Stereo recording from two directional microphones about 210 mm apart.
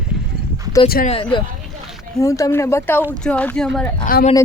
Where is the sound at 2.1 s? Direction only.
15° left (ahead or behind).